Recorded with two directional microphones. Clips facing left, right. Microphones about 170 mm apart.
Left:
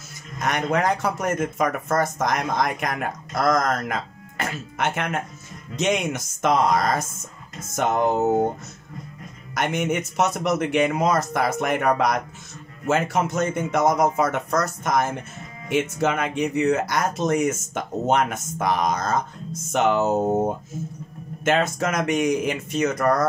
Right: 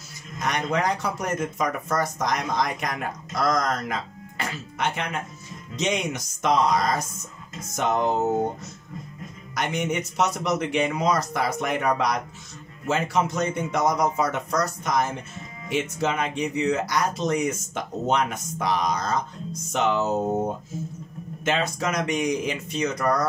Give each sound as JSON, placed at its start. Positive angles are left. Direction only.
{"t": 0.4, "sound": "speech", "side_deg": 50}
{"t": 9.5, "sound": "speech", "side_deg": 50}
{"t": 21.5, "sound": "speech", "side_deg": 50}